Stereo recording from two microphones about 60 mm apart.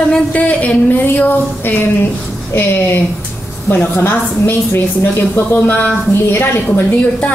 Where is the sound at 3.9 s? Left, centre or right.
Left.